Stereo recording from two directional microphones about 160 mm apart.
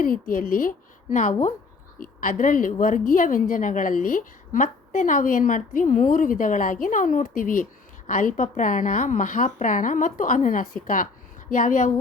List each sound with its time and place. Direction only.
0.0 s a woman's voice: 60° left (ahead or behind)